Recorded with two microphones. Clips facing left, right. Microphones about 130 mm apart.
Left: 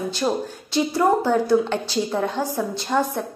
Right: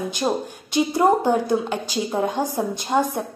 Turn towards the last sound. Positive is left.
turn(degrees=-15)  # may be behind; listen again after turning